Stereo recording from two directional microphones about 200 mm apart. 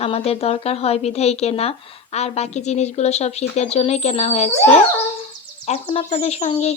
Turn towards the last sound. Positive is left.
turn(degrees=30)  # may be behind; listen again after turning